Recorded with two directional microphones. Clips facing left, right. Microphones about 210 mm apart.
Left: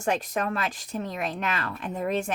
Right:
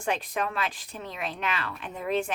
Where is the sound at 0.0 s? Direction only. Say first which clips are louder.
Left 3 dB; 45° left (ahead or behind).